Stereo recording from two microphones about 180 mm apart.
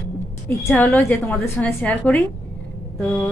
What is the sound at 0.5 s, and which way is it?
A woman's voice, 15° left (ahead or behind).